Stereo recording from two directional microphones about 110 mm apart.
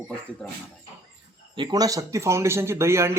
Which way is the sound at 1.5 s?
35° right (ahead or behind).